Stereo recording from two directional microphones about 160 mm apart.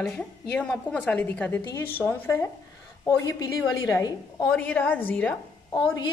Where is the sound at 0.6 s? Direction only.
5° left (ahead or behind); by 4.5 s 25° left (ahead or behind).